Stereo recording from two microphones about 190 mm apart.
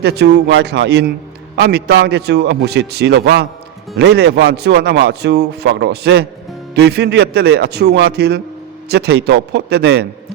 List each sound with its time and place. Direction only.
0.0 s speech: 60° right (ahead or behind)